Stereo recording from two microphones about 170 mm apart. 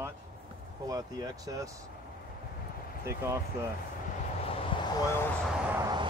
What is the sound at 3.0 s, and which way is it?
Speech, 15° right (ahead or behind).